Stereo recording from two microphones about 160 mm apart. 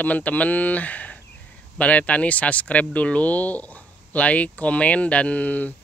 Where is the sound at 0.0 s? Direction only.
10° left (ahead or behind).